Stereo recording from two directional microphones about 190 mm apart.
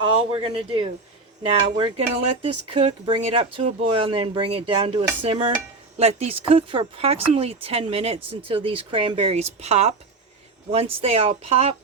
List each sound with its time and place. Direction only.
0.1 s speech: 30° right (ahead or behind)